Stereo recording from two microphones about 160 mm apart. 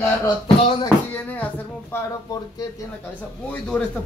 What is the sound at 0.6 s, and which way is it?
Music, 35° left (ahead or behind).